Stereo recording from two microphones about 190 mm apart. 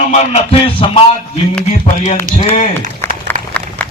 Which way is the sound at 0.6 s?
30° left (ahead or behind).